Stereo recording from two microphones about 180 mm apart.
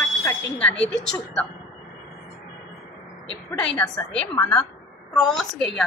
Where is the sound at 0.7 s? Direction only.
80° left.